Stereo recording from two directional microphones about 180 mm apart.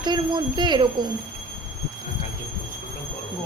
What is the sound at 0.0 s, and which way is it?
Speech, 25° right (ahead or behind).